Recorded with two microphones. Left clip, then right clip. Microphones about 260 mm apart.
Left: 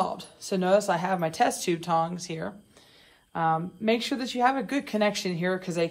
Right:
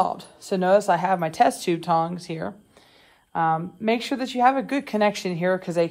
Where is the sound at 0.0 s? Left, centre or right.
Right.